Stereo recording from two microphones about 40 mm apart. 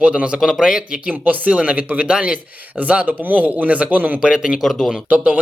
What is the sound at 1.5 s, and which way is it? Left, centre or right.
Speech, right.